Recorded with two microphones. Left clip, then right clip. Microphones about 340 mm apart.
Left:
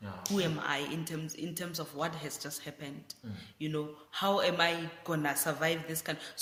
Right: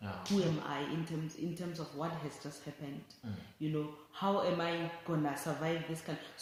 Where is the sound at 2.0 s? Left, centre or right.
Left.